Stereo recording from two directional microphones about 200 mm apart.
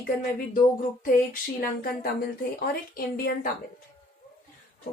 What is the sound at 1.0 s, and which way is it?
Speech, 45° left (ahead or behind).